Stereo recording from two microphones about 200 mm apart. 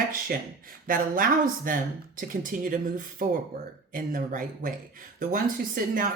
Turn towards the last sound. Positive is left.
turn(degrees=-45)  # may be behind; listen again after turning